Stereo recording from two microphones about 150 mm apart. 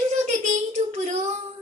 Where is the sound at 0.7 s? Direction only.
50° right (ahead or behind).